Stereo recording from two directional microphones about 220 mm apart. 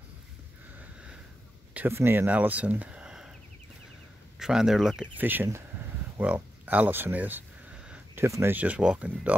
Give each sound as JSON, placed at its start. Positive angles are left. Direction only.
{"t": 1.7, "sound": "speech", "side_deg": -10}
{"t": 4.4, "sound": "speech", "side_deg": -5}